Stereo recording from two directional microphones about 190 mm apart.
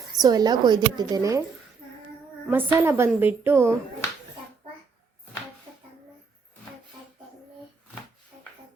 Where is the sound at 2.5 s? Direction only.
10° right (ahead or behind).